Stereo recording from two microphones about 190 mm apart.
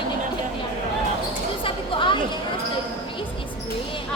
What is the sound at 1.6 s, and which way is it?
Chatter, 25° left (ahead or behind).